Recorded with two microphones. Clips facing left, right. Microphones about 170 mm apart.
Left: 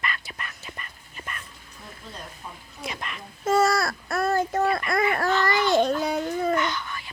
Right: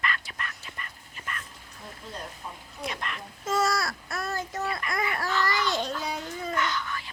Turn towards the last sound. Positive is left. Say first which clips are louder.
# left 2 dB
turn(degrees=20)  # may be behind; listen again after turning